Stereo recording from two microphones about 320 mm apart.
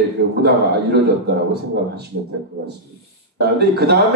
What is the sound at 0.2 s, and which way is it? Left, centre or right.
A man's voice, right.